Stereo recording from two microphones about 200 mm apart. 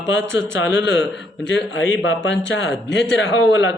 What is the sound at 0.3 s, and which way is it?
A man's voice, 70° left (ahead or behind).